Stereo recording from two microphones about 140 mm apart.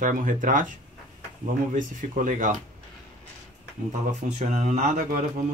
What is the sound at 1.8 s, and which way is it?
Speech, 70° right (ahead or behind).